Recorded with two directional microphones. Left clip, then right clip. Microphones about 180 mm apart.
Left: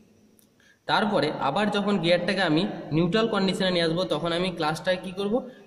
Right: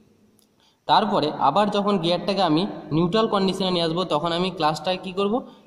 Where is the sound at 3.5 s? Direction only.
20° right (ahead or behind).